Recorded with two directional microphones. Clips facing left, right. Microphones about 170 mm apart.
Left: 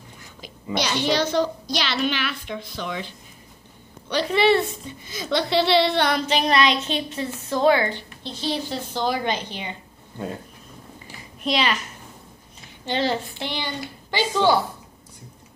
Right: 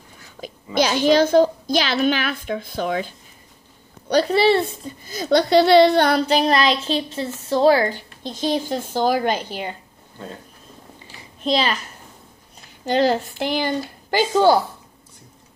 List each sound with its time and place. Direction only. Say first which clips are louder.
0.8 s a woman's voice: right 7 dB; 45° right (ahead or behind)
11.5 s a woman's voice: right 3 dB; 35° right (ahead or behind)
12.8 s a woman's voice: right 6 dB; 40° right (ahead or behind)